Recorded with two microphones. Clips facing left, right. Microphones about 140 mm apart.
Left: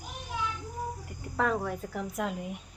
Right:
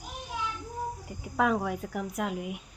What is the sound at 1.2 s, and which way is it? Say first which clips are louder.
Speech: right 2 dB; 10° right (ahead or behind).